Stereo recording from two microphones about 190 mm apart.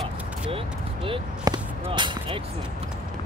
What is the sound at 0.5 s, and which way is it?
Speech, 30° right (ahead or behind).